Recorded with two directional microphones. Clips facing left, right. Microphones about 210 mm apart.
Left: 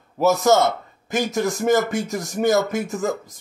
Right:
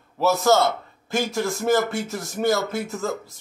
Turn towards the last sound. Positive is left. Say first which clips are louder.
# left 3 dB
turn(degrees=15)  # may be behind; listen again after turning